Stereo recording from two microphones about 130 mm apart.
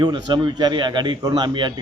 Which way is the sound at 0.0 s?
35° right (ahead or behind).